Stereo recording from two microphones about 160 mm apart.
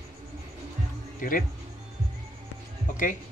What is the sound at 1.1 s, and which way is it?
Speech, 55° left (ahead or behind).